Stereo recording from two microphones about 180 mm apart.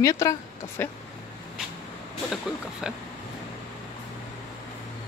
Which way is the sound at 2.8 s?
5° right (ahead or behind).